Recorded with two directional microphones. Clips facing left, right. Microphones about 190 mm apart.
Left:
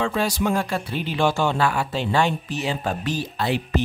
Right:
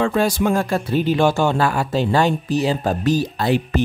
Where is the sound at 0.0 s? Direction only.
50° right (ahead or behind).